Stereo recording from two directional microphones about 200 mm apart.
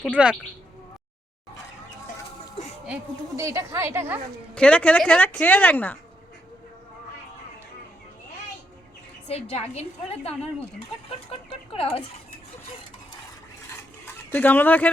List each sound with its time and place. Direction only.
0.1 s speech: 5° right (ahead or behind)
2.8 s a woman's voice: 5° right (ahead or behind)
4.5 s a woman's voice: 5° left (ahead or behind)
9.2 s a woman's voice: 30° left (ahead or behind)
11.3 s speech: 30° left (ahead or behind)
14.0 s a sound: 10° left (ahead or behind)